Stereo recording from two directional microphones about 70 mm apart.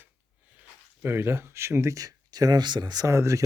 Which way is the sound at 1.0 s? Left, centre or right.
Right.